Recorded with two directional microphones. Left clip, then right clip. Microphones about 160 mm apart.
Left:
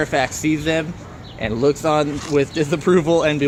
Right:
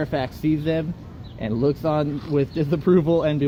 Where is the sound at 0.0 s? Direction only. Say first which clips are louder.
Left 6 dB; 40° right (ahead or behind).